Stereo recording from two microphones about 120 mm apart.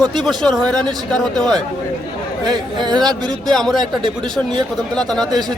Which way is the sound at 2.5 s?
35° right (ahead or behind).